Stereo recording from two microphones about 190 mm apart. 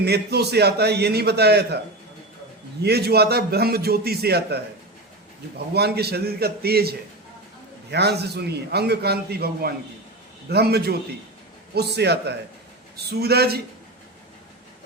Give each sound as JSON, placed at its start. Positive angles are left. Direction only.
{"t": 0.0, "sound": "a man's voice", "side_deg": -60}
{"t": 2.8, "sound": "a man's voice", "side_deg": -60}